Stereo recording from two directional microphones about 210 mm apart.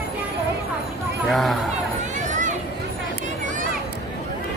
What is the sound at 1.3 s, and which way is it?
Speech, centre (ahead or behind).